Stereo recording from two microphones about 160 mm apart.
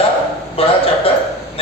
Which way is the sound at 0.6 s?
35° left (ahead or behind).